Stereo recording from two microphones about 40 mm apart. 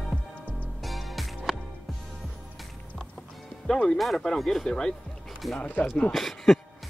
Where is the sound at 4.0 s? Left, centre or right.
Centre.